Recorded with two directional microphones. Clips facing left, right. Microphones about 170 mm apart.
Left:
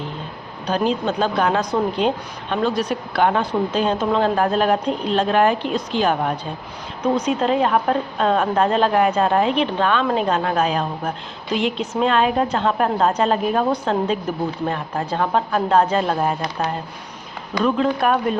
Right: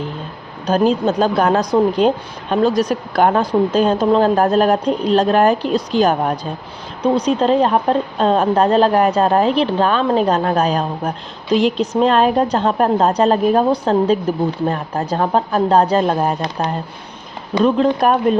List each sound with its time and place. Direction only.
0.7 s speech: 40° right (ahead or behind)